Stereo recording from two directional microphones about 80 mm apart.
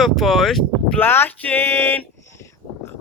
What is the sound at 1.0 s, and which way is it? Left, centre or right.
Speech, left.